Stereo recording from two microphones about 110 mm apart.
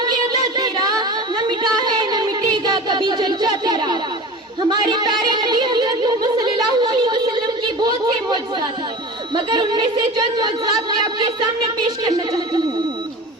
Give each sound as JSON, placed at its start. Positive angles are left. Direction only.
{"t": 0.0, "sound": "child singing", "side_deg": -40}
{"t": 1.5, "sound": "a sound", "side_deg": -45}
{"t": 9.3, "sound": "a woman's voice", "side_deg": -45}